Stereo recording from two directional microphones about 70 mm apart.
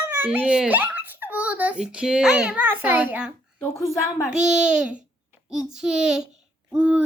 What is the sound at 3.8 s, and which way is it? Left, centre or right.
A woman's voice, centre.